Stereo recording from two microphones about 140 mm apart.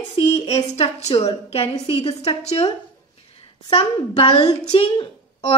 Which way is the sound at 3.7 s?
45° left (ahead or behind).